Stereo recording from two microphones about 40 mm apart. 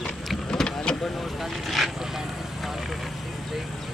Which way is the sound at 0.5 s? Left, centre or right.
Centre.